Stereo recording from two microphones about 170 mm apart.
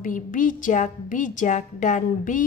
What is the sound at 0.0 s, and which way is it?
A woman's voice, 50° left (ahead or behind).